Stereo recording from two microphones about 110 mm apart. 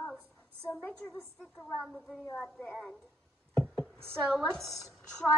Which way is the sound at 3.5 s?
5° left (ahead or behind).